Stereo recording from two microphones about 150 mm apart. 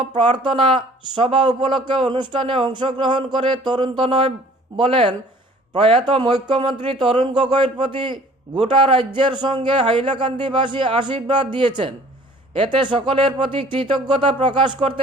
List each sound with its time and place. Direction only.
0.0 s a man's voice: 35° right (ahead or behind)